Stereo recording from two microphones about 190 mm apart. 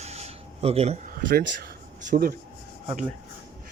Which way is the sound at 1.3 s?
55° right (ahead or behind).